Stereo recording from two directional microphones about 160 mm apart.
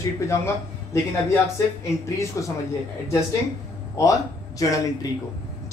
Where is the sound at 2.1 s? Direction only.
20° left (ahead or behind).